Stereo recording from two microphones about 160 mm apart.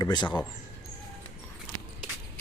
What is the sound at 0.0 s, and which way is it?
Speech, 30° left (ahead or behind).